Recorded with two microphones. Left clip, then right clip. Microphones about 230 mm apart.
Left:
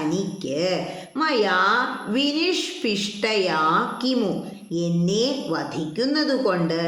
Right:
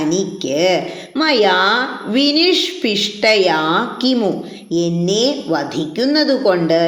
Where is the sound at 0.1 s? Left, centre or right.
Centre.